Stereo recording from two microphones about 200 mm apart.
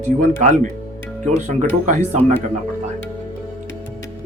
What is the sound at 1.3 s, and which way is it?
Speech, 40° right (ahead or behind).